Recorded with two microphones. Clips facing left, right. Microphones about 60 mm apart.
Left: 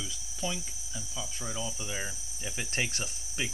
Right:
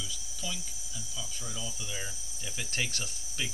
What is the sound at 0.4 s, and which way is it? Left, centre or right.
Speech, left.